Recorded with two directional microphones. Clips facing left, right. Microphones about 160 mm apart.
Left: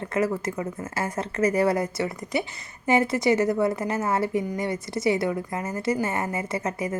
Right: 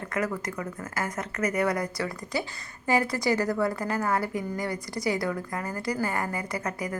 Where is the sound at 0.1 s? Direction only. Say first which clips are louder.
Left 5 dB; 25° left (ahead or behind).